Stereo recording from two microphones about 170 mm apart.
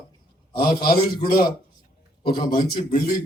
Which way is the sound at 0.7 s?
60° left (ahead or behind).